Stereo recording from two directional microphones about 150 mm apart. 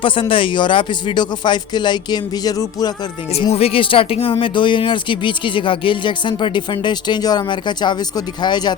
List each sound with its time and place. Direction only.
0.0 s speech: 35° left (ahead or behind)
3.5 s speech: 40° left (ahead or behind)